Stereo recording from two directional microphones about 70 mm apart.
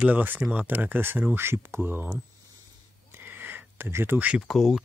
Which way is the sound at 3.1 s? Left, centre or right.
Right.